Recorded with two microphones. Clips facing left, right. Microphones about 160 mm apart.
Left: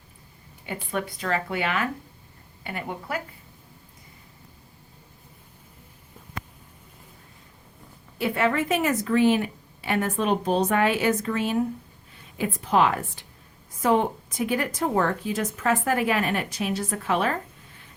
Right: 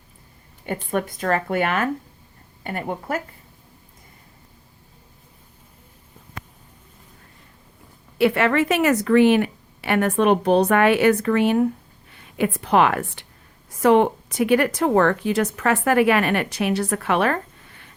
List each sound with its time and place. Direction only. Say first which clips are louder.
0.6 s speech: right 5 dB; 50° right (ahead or behind)
8.2 s a woman's voice: right 6 dB; 80° right